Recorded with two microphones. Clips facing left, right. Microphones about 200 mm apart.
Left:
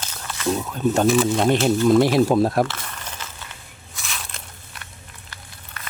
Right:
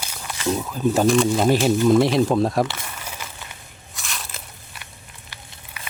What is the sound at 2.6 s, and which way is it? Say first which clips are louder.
Crumpling: even; 10° right (ahead or behind).